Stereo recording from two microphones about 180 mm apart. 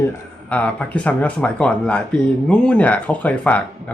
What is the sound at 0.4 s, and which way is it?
A man's voice, 10° left (ahead or behind).